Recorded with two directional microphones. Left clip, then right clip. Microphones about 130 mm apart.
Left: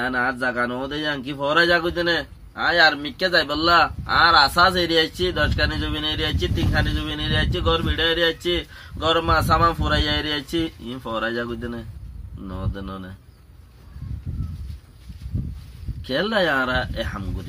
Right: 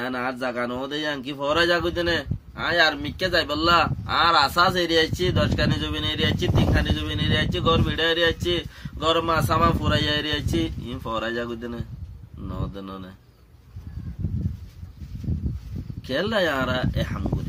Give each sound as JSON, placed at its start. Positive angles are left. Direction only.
{"t": 0.0, "sound": "a man's voice", "side_deg": -15}
{"t": 16.1, "sound": "a man's voice", "side_deg": -15}